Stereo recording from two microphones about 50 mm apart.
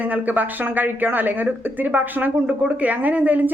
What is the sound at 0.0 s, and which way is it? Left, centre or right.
Speech, right.